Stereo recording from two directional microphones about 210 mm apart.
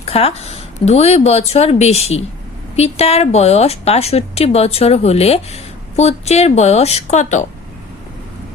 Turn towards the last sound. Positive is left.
turn(degrees=35)  # may be behind; listen again after turning